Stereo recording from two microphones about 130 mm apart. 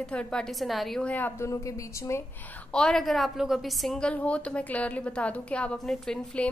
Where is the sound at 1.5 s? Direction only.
25° left (ahead or behind).